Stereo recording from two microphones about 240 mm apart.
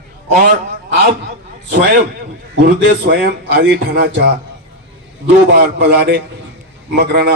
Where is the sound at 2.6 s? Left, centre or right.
Right.